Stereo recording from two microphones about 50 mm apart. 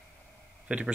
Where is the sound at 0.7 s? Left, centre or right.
Right.